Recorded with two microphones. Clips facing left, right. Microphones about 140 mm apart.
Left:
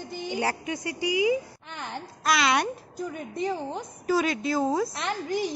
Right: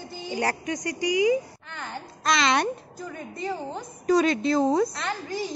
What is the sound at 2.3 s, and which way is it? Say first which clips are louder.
Speech: right 1 dB; 5° left (ahead or behind).